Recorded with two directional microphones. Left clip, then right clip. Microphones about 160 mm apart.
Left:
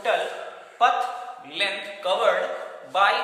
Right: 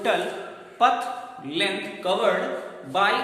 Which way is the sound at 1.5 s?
5° right (ahead or behind).